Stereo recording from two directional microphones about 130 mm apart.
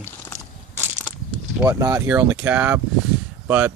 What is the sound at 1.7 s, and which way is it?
Speech, 25° right (ahead or behind).